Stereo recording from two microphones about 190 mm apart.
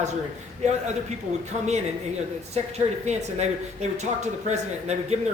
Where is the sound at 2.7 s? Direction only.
35° right (ahead or behind).